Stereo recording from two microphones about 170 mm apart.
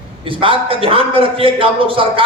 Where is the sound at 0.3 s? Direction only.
30° right (ahead or behind).